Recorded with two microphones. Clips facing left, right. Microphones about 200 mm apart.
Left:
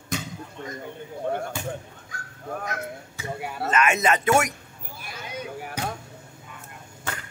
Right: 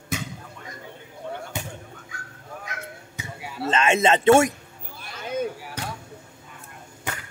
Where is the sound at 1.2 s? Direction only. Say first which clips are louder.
Left 7 dB; 55° left (ahead or behind).